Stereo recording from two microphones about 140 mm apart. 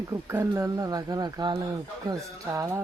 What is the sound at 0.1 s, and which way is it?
Speech, 20° right (ahead or behind).